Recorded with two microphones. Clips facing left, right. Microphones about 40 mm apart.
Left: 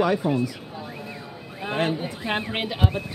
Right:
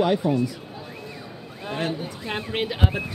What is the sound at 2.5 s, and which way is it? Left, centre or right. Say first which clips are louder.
Speech: right 1 dB; centre.